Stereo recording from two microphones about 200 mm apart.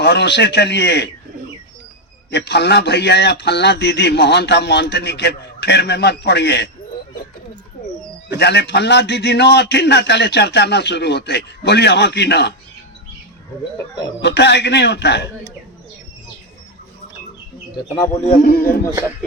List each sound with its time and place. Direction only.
0.0 s a man's voice: 55° left (ahead or behind)
2.3 s a man's voice: 60° left (ahead or behind)
8.3 s a man's voice: 60° left (ahead or behind)
14.2 s a man's voice: 60° left (ahead or behind)
17.9 s a man's voice: 10° left (ahead or behind)
18.4 s a man's voice: 50° left (ahead or behind)